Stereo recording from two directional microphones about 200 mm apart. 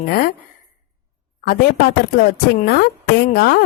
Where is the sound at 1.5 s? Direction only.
45° left (ahead or behind).